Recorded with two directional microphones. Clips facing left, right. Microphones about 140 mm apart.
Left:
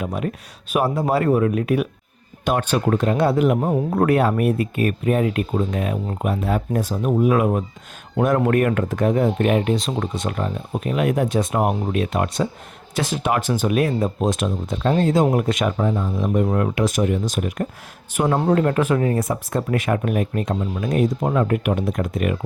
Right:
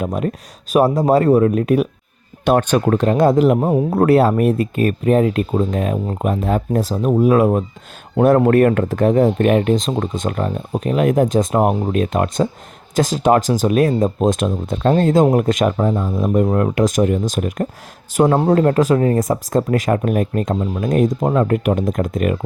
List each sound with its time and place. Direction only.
0.0 s speech: 40° right (ahead or behind)
18.1 s speech: 35° right (ahead or behind)